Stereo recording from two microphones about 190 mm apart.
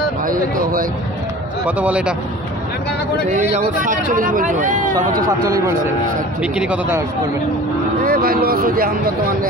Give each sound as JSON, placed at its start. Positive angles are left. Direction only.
{"t": 0.2, "sound": "speech", "side_deg": -45}
{"t": 1.7, "sound": "speech", "side_deg": -5}
{"t": 3.3, "sound": "speech", "side_deg": -40}
{"t": 6.4, "sound": "speech", "side_deg": -5}
{"t": 8.0, "sound": "speech", "side_deg": -50}